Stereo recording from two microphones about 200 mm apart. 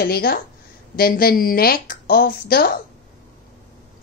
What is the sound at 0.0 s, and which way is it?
Speech, 50° left (ahead or behind).